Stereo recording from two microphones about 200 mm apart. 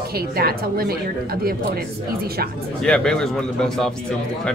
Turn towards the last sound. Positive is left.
turn(degrees=5)  # may be behind; listen again after turning